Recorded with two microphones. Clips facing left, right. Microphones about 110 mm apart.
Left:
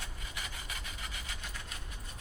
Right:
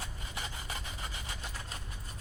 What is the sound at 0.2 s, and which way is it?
Rub, 30° right (ahead or behind).